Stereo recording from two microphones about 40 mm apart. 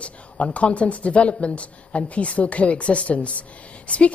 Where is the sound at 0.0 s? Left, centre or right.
Left.